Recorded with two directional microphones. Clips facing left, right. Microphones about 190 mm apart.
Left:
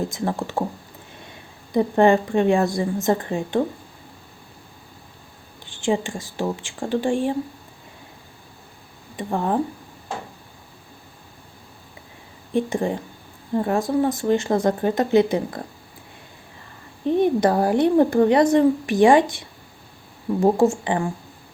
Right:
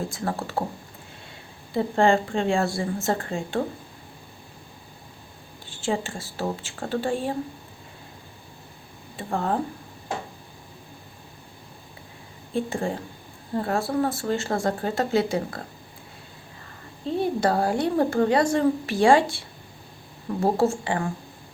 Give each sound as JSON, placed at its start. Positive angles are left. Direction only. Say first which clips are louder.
{"t": 0.1, "sound": "speech", "louder": "left 4 dB", "side_deg": 20}
{"t": 1.7, "sound": "speech", "louder": "left 4 dB", "side_deg": 20}
{"t": 5.8, "sound": "speech", "louder": "left 5 dB", "side_deg": 15}
{"t": 9.1, "sound": "speech", "louder": "left 3 dB", "side_deg": 15}
{"t": 12.5, "sound": "speech", "louder": "left 4 dB", "side_deg": 20}
{"t": 17.1, "sound": "speech", "louder": "left 5 dB", "side_deg": 20}